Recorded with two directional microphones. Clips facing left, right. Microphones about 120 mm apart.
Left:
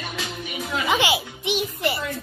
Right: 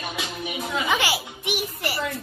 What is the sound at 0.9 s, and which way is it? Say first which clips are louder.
Music: left 5 dB; 20° left (ahead or behind).